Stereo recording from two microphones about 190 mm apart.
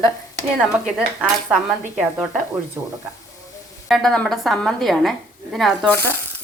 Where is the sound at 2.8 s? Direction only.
15° right (ahead or behind).